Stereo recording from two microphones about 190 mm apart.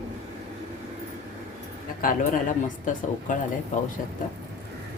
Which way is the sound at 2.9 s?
40° left (ahead or behind).